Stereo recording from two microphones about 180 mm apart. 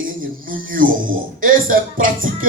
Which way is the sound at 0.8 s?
50° right (ahead or behind).